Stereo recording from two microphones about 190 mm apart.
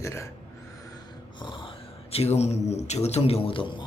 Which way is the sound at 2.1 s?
35° left (ahead or behind).